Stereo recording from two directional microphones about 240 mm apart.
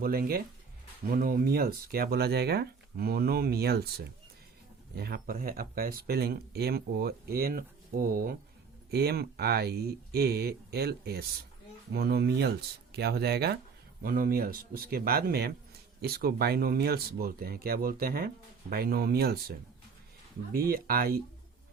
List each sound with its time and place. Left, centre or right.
0.0 s speech: right